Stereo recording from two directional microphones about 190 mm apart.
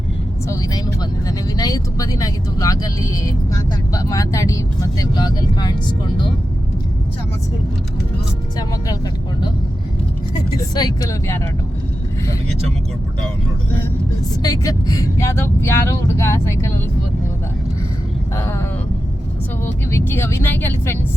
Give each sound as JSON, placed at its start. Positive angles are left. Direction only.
{"t": 0.4, "sound": "speech", "side_deg": 15}
{"t": 10.8, "sound": "speech", "side_deg": 20}
{"t": 14.4, "sound": "speech", "side_deg": 20}
{"t": 18.3, "sound": "vehicle", "side_deg": 15}
{"t": 19.6, "sound": "speech", "side_deg": 10}